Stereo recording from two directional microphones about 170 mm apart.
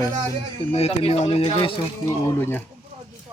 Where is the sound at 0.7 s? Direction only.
35° left (ahead or behind).